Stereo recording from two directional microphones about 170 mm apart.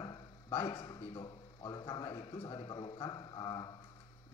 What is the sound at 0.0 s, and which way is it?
A man's voice, 25° left (ahead or behind).